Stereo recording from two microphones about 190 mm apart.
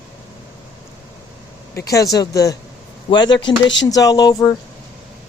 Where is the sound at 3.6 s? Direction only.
70° left (ahead or behind).